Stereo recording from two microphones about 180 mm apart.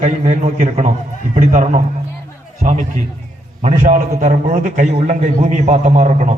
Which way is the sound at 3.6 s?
40° right (ahead or behind).